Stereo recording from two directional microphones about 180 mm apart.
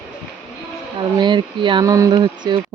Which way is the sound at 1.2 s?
25° right (ahead or behind).